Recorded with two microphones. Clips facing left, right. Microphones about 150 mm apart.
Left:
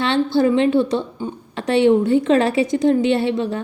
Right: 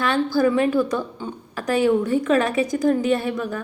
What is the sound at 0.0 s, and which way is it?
A woman's voice, 25° left (ahead or behind).